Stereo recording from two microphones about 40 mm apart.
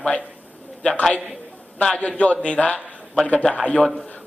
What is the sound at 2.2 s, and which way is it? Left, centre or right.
Speech, left.